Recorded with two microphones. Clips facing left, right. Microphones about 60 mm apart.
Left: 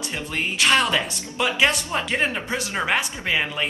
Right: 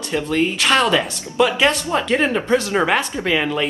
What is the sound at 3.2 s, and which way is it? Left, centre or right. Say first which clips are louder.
Speech: right 4 dB; centre.